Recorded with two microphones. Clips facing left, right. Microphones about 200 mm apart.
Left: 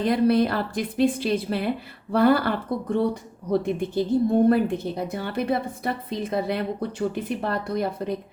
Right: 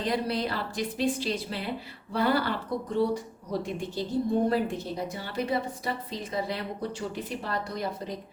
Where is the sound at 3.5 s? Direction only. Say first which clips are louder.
Left 8 dB; 55° left (ahead or behind).